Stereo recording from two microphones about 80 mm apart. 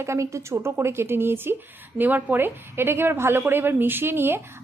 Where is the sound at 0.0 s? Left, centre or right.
Right.